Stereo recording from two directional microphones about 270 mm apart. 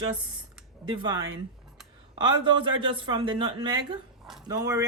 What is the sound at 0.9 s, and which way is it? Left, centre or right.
Speech, centre.